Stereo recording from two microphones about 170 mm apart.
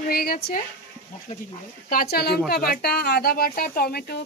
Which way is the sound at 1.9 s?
60° left (ahead or behind).